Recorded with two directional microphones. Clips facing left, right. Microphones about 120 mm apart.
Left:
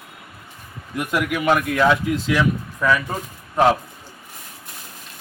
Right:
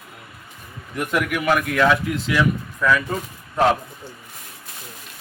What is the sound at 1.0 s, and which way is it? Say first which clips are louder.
Speech: even; 15° left (ahead or behind).